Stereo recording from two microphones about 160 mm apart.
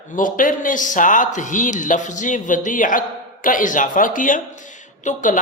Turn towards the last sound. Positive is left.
turn(degrees=55)  # may be behind; listen again after turning